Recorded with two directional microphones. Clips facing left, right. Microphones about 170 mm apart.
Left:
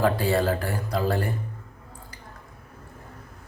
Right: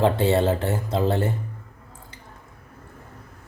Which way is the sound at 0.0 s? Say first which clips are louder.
Right 3 dB; 25° right (ahead or behind).